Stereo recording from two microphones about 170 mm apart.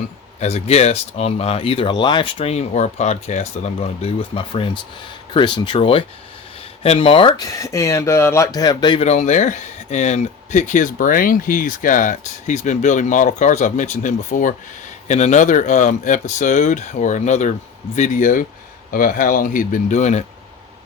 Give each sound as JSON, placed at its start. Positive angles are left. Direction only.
{"t": 0.3, "sound": "speech", "side_deg": 40}
{"t": 9.0, "sound": "speech", "side_deg": 40}